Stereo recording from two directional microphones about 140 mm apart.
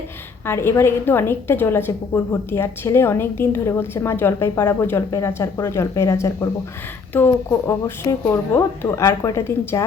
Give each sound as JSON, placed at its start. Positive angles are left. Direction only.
{"t": 0.4, "sound": "a woman's voice", "side_deg": 15}